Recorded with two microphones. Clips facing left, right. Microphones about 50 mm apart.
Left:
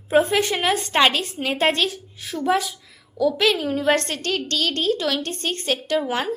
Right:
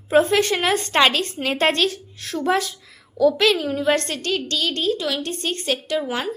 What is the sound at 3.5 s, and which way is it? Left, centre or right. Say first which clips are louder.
A woman's voice: even; left.